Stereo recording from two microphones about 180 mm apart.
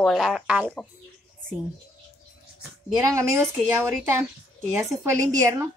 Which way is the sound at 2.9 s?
15° right (ahead or behind).